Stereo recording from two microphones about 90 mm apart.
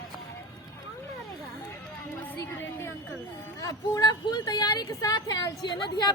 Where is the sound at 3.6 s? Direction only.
40° left (ahead or behind).